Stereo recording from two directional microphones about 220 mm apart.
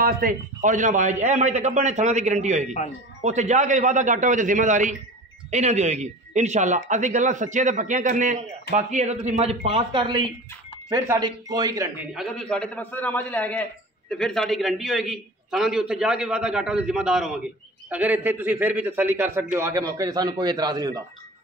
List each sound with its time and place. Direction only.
0.0 s a man's voice: 40° right (ahead or behind); by 12.1 s 15° right (ahead or behind)
12.1 s a man's voice: centre (ahead or behind); by 21.0 s 15° right (ahead or behind)